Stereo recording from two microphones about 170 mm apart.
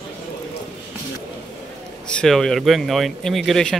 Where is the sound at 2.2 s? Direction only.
Centre (ahead or behind).